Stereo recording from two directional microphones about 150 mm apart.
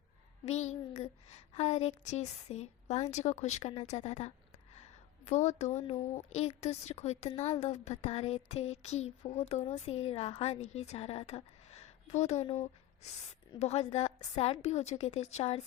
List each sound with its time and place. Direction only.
0.4 s a woman's voice: 50° left (ahead or behind)